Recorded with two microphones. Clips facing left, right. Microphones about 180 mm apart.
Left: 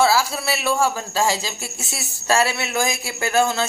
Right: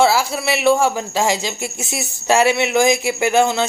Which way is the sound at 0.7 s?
20° right (ahead or behind).